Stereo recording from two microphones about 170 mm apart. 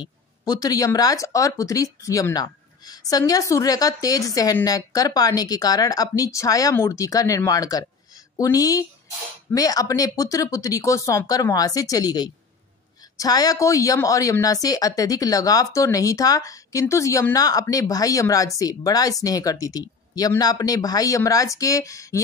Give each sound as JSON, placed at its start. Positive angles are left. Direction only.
{"t": 0.0, "sound": "speech", "side_deg": 20}